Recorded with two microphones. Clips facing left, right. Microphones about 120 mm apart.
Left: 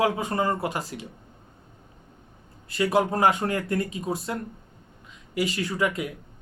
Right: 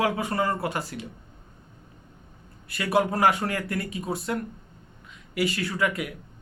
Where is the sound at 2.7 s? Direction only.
20° left (ahead or behind).